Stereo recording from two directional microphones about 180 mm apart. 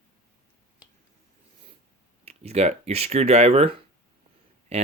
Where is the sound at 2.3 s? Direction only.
35° right (ahead or behind).